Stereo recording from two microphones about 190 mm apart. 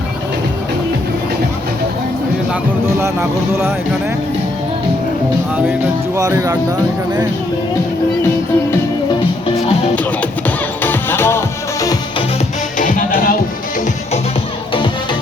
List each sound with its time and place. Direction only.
3.0 s speech: 15° right (ahead or behind)
6.1 s speech: 15° right (ahead or behind)
10.8 s music: 10° left (ahead or behind)
12.8 s music: 45° left (ahead or behind)